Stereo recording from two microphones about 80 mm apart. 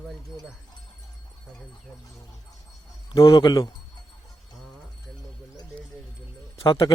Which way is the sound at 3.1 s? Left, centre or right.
Left.